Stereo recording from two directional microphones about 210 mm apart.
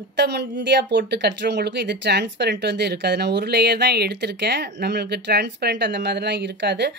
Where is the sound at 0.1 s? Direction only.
55° right (ahead or behind).